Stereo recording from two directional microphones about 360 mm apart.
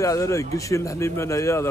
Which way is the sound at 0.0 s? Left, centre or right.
Centre.